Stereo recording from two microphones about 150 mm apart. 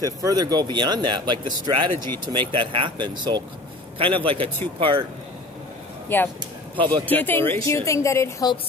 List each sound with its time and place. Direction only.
0.0 s speech: 25° right (ahead or behind)
6.0 s a woman's voice: 15° left (ahead or behind)